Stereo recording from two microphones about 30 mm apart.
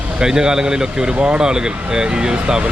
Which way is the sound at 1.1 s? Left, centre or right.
Right.